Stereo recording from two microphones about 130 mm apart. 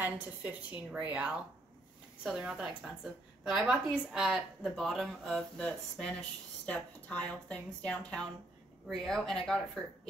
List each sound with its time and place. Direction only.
0.0 s a woman's voice: 10° right (ahead or behind); by 9.6 s 5° left (ahead or behind)